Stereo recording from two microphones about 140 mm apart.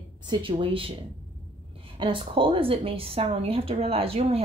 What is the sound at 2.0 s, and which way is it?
Speech, 40° right (ahead or behind).